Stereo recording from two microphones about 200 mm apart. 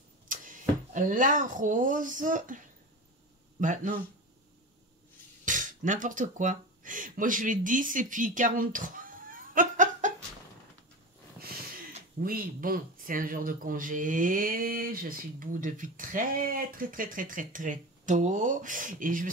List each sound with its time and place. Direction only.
0.3 s speech: 40° right (ahead or behind)
3.6 s speech: 40° right (ahead or behind)
5.4 s speech: 40° right (ahead or behind)
12.2 s speech: 45° right (ahead or behind)